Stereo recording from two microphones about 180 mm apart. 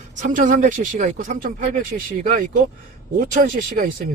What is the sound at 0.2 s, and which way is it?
Speech, 50° right (ahead or behind).